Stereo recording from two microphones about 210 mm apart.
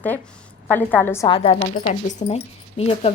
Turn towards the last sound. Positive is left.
turn(degrees=30)  # may be behind; listen again after turning